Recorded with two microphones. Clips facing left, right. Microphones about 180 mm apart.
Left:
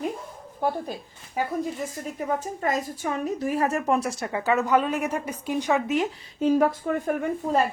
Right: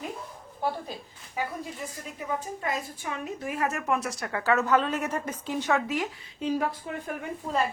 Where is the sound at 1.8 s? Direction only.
45° left (ahead or behind); by 6.1 s 20° left (ahead or behind).